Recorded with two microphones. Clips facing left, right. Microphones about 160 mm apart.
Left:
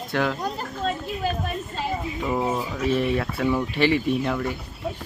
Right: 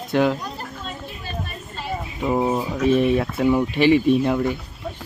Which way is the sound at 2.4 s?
30° right (ahead or behind).